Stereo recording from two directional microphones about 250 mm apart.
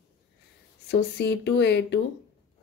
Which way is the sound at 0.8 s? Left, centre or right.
Left.